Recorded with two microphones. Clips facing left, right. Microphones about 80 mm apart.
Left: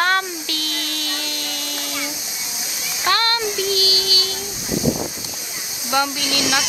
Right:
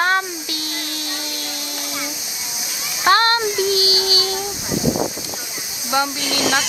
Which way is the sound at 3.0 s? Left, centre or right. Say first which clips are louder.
Right 5 dB; right.